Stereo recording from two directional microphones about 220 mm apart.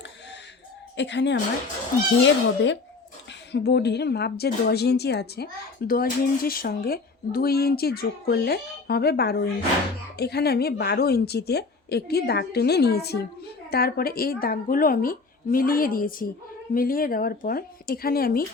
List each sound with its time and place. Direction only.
0.9 s a woman's voice: 55° left (ahead or behind)